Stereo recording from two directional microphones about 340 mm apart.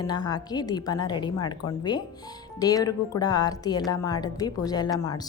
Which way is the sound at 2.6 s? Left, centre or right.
Centre.